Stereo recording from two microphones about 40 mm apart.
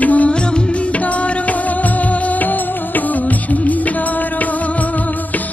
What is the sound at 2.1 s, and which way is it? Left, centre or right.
Music of bollywood, left.